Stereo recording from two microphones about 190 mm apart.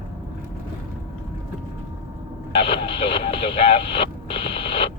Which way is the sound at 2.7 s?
30° left (ahead or behind).